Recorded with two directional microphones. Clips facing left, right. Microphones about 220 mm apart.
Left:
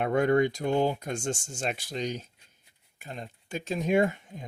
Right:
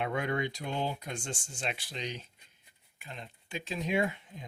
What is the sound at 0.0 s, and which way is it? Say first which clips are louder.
Speech: left 9 dB; 45° left (ahead or behind).